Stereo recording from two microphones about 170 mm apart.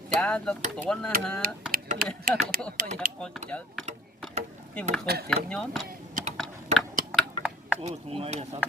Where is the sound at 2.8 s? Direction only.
55° right (ahead or behind).